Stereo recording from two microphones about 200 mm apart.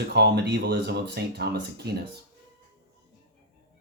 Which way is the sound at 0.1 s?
60° right (ahead or behind).